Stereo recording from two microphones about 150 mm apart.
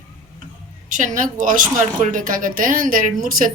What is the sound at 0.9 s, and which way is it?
A woman's voice, 60° right (ahead or behind).